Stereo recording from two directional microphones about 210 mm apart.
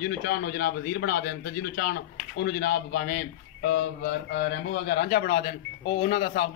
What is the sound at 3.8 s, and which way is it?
Mantra, 60° left (ahead or behind).